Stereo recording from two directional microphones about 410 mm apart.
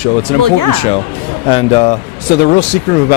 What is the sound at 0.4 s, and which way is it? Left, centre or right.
Speech, right.